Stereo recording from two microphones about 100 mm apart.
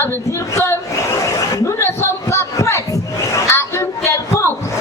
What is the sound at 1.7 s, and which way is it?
Speech, 25° left (ahead or behind).